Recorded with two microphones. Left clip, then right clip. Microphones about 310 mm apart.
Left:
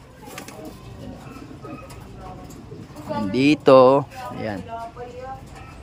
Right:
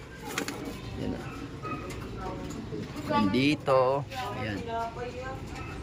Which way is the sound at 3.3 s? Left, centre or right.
Centre.